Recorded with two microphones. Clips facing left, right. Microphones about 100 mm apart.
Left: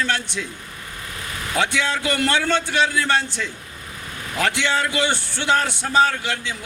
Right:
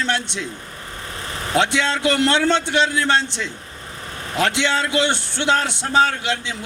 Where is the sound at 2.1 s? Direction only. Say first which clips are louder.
Right 4 dB; 20° right (ahead or behind).